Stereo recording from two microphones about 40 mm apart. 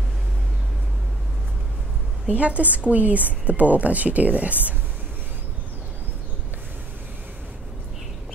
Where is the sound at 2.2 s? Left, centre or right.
Right.